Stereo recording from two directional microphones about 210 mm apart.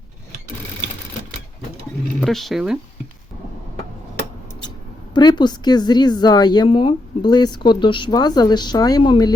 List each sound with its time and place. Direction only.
2.2 s speech: centre (ahead or behind)
5.1 s speech: 20° left (ahead or behind)